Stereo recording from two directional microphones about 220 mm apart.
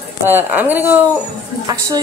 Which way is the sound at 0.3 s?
10° right (ahead or behind).